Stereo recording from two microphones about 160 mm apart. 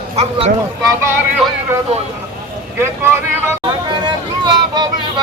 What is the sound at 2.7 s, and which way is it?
Speech, 15° right (ahead or behind).